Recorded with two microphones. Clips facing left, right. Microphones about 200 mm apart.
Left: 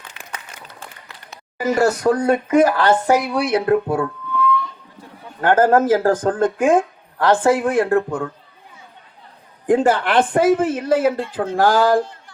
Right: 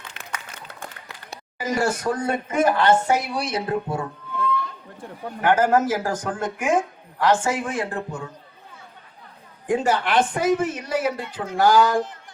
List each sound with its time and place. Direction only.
1.5 s speech: 60° left (ahead or behind)
5.5 s speech: 55° left (ahead or behind)
9.6 s speech: 55° left (ahead or behind)